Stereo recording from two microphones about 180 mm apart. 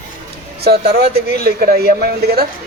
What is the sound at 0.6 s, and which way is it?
Speech, 65° right (ahead or behind).